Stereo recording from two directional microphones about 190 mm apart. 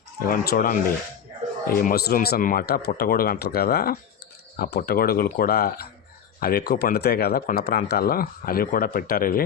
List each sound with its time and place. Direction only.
0.2 s speech: 50° left (ahead or behind)